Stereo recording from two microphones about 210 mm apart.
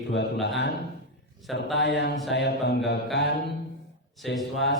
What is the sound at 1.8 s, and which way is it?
Mantra, 55° left (ahead or behind).